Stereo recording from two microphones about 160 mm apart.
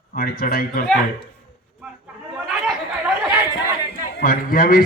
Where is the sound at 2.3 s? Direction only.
Centre (ahead or behind).